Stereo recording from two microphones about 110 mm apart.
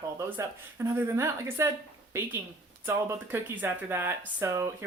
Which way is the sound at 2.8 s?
20° right (ahead or behind).